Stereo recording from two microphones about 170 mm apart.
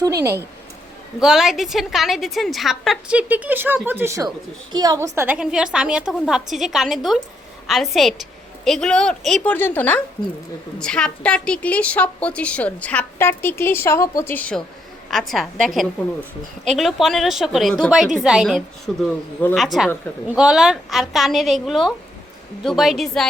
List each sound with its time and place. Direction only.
0.2 s speech: 15° right (ahead or behind)
1.2 s a woman's voice: centre (ahead or behind)